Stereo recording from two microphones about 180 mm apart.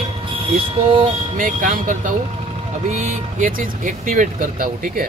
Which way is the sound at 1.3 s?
50° right (ahead or behind).